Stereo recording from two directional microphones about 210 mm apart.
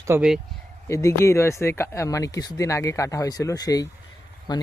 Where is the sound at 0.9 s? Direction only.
15° left (ahead or behind).